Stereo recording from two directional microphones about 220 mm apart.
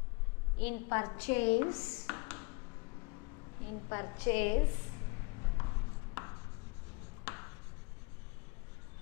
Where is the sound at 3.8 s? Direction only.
20° left (ahead or behind).